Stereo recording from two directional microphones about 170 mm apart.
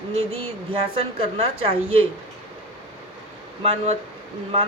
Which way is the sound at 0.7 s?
35° right (ahead or behind).